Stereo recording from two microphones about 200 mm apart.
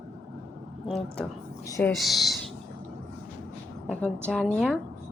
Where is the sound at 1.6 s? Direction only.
15° left (ahead or behind).